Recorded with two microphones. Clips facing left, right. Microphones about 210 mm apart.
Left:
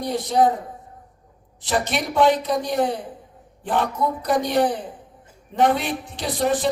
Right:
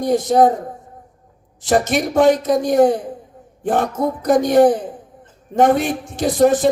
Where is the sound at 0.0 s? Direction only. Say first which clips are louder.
Right 6 dB; 45° right (ahead or behind).